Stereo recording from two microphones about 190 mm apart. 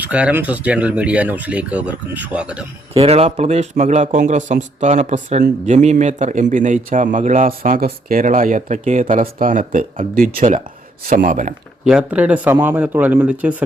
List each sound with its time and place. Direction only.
0.0 s speech: 5° right (ahead or behind)
2.9 s a man's voice: 30° right (ahead or behind)
11.9 s speech: 5° right (ahead or behind)